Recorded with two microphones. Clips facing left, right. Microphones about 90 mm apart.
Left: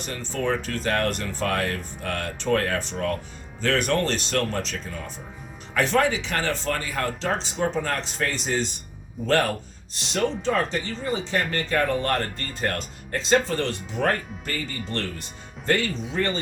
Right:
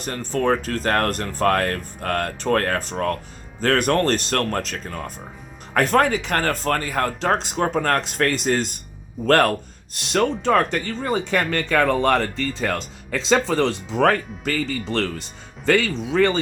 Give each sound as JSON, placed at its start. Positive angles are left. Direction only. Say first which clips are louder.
{"t": 0.0, "sound": "speech", "louder": "right 5 dB", "side_deg": -40}